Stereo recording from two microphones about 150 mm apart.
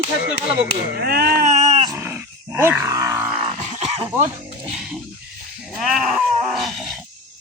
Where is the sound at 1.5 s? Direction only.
50° right (ahead or behind).